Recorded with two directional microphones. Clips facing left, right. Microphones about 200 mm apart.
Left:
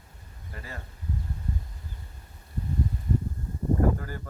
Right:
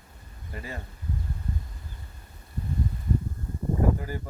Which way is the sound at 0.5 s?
15° right (ahead or behind).